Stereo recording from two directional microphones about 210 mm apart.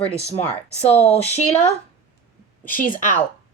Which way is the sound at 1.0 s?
30° left (ahead or behind).